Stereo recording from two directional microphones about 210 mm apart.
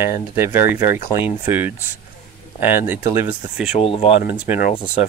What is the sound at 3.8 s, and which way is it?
Speech, 25° left (ahead or behind).